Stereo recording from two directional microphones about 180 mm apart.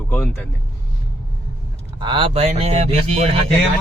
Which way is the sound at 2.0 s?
25° right (ahead or behind).